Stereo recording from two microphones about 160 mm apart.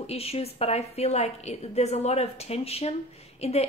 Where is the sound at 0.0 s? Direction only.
40° left (ahead or behind).